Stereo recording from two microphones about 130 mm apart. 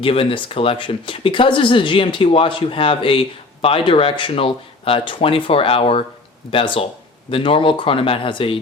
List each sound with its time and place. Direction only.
0.0 s speech: 45° left (ahead or behind)